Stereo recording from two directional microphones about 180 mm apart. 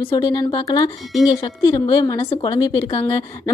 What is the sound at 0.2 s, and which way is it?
A woman's voice, 25° left (ahead or behind).